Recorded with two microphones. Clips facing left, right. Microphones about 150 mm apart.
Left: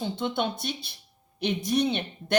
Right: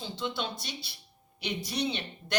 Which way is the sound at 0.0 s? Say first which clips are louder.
Left 6 dB; 55° left (ahead or behind).